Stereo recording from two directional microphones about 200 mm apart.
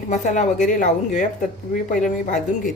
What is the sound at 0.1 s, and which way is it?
Speech, 40° left (ahead or behind).